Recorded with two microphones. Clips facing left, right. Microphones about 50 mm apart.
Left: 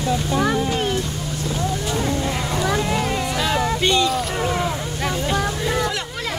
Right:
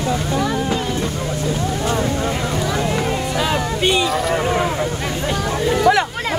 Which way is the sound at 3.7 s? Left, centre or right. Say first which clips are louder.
Right 1 dB; centre.